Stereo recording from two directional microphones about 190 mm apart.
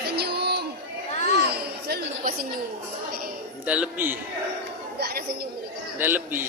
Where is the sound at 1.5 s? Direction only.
55° right (ahead or behind).